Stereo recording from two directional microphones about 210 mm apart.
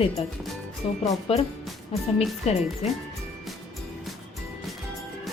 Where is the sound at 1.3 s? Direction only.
25° left (ahead or behind).